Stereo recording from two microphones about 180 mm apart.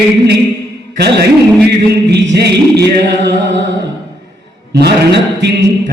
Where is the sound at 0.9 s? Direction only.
70° right (ahead or behind).